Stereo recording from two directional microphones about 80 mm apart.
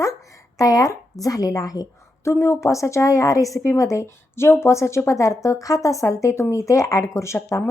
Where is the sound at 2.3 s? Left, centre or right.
Left.